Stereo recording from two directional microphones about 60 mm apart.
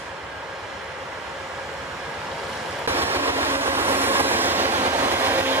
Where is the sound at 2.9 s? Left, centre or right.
Right.